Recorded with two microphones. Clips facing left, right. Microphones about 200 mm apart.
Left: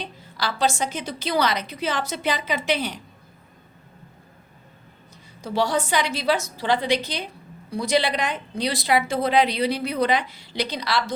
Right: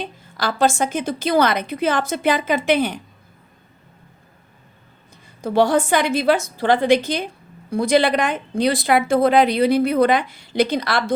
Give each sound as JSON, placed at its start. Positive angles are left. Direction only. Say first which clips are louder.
{"t": 0.0, "sound": "speech", "louder": "right 4 dB", "side_deg": -50}
{"t": 5.4, "sound": "speech", "louder": "right 7 dB", "side_deg": -55}